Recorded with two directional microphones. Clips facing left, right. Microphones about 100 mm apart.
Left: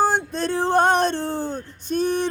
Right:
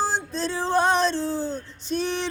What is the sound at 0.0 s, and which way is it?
Music, 55° left (ahead or behind).